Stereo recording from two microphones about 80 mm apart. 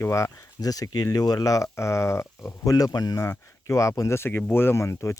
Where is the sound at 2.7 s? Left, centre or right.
Left.